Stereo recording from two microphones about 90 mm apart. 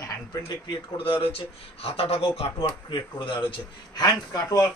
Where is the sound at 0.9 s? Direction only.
90° left; by 3.3 s 70° left (ahead or behind).